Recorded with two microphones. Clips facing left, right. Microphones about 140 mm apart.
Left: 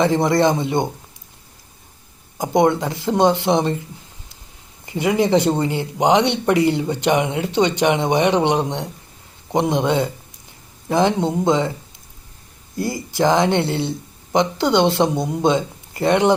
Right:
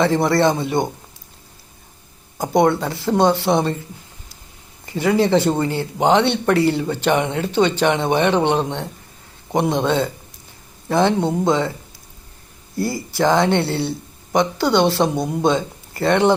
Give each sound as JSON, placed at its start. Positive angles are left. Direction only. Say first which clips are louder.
{"t": 0.0, "sound": "speech", "louder": "even", "side_deg": 15}
{"t": 2.4, "sound": "speech", "louder": "even", "side_deg": 20}
{"t": 4.9, "sound": "speech", "louder": "right 1 dB", "side_deg": 20}
{"t": 12.7, "sound": "speech", "louder": "right 1 dB", "side_deg": 15}